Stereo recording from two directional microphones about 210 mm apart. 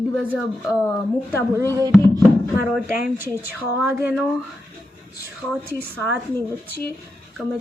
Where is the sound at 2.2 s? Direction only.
10° right (ahead or behind).